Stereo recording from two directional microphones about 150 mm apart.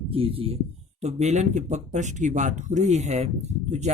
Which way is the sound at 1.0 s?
50° right (ahead or behind).